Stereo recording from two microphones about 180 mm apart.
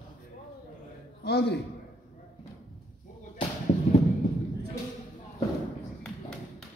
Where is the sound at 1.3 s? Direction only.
65° left (ahead or behind).